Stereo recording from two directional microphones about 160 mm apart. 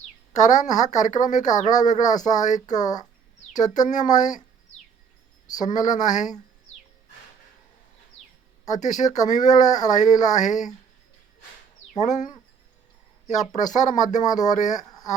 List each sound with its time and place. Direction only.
0.3 s a woman's voice: 50° left (ahead or behind)
2.6 s speech: 25° left (ahead or behind)
3.6 s a woman's voice: 50° left (ahead or behind)
5.5 s a woman's voice: 50° left (ahead or behind)
8.7 s a woman's voice: 50° left (ahead or behind)
11.9 s a woman's voice: 50° left (ahead or behind)
13.6 s a woman's voice: 50° left (ahead or behind)
14.8 s a sound: 25° left (ahead or behind)